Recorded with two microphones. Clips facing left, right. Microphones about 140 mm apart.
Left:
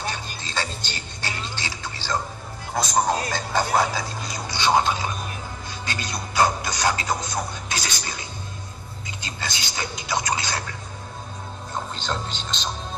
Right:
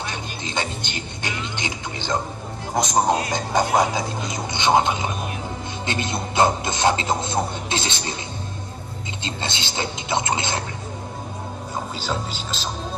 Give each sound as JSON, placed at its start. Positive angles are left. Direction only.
{"t": 0.0, "sound": "music", "side_deg": -20}
{"t": 2.7, "sound": "speech", "side_deg": -20}
{"t": 9.2, "sound": "speech", "side_deg": -25}
{"t": 11.7, "sound": "speech", "side_deg": -5}